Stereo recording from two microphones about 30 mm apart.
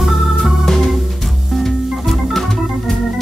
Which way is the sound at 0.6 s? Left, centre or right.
Centre.